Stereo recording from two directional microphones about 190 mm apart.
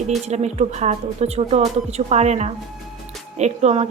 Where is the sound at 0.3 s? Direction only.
35° right (ahead or behind).